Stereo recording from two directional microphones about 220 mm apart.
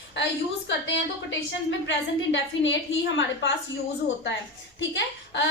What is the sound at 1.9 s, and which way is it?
Speech, 55° left (ahead or behind).